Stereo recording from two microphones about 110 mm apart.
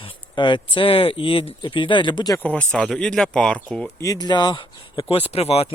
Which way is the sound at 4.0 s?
35° left (ahead or behind).